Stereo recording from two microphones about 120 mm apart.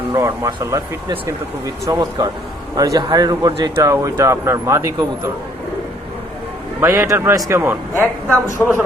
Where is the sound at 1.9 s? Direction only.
35° right (ahead or behind).